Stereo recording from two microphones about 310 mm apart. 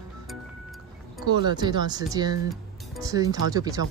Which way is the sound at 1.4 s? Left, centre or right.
Centre.